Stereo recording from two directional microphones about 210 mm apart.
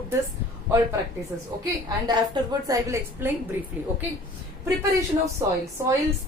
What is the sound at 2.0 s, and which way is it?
A man's voice, 20° right (ahead or behind).